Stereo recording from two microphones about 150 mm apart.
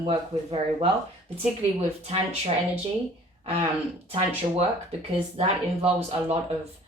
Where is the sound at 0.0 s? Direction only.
40° right (ahead or behind).